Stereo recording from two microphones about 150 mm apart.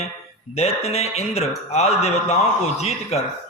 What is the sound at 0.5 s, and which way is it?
Speech, 45° left (ahead or behind).